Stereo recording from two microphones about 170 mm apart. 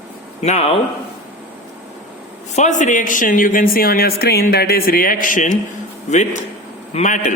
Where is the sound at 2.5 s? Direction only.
45° left (ahead or behind).